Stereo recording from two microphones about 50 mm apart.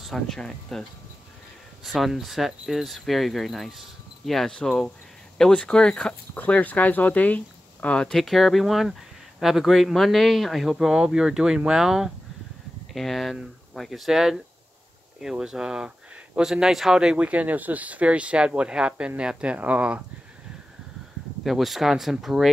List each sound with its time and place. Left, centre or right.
0.0 s speech: centre
1.9 s speech: centre; by 8.0 s left
8.0 s speech: centre
10.9 s speech: centre
12.9 s speech: centre
16.9 s speech: centre
21.5 s speech: centre